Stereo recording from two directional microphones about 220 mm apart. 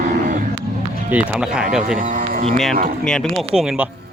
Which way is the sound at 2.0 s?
35° right (ahead or behind).